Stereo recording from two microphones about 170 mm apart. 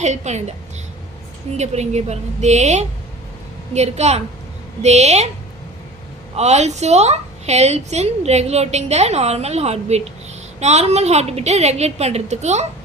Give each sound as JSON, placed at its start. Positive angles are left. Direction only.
{"t": 0.0, "sound": "a woman's voice", "side_deg": -40}
{"t": 1.5, "sound": "a woman's voice", "side_deg": -40}
{"t": 6.3, "sound": "a woman's voice", "side_deg": -40}